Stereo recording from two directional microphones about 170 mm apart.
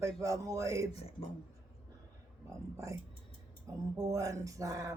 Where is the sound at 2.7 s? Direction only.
20° right (ahead or behind).